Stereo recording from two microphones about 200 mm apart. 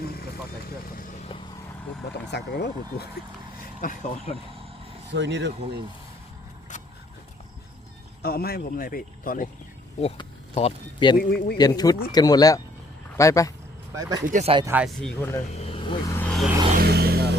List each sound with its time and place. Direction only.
2.3 s speech: 55° left (ahead or behind)
3.8 s speech: 40° left (ahead or behind)
5.1 s speech: 60° right (ahead or behind)
8.2 s speech: 50° left (ahead or behind)
10.0 s speech: 30° left (ahead or behind)
11.2 s speech: 50° left (ahead or behind)
11.5 s speech: 20° left (ahead or behind)
13.9 s speech: 15° right (ahead or behind)
14.3 s speech: 35° right (ahead or behind)
14.7 s speech: 5° right (ahead or behind)
15.5 s vehicle: 30° left (ahead or behind); by 16.5 s 5° left (ahead or behind)
16.7 s vehicle: 50° right (ahead or behind)